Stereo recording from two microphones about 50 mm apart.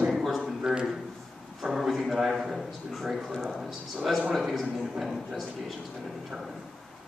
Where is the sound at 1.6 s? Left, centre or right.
Centre.